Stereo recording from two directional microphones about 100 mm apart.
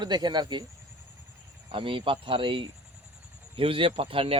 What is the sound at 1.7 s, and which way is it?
Speech, 60° right (ahead or behind).